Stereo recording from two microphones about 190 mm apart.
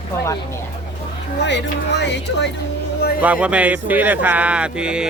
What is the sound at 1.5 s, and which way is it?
Speech, 65° left (ahead or behind).